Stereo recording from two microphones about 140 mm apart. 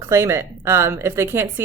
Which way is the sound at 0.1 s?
20° right (ahead or behind).